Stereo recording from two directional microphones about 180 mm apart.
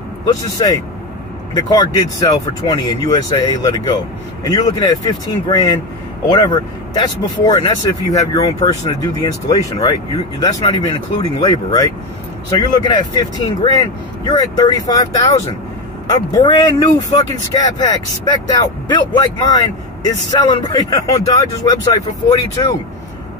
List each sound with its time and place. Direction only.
0.6 s speech: 25° left (ahead or behind)